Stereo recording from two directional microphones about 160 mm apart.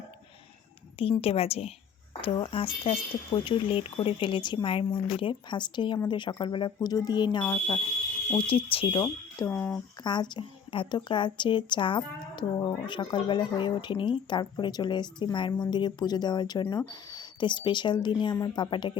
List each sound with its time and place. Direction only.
1.2 s a woman's voice: 35° left (ahead or behind)
9.5 s speech: 15° left (ahead or behind)
10.0 s a woman's voice: 30° left (ahead or behind)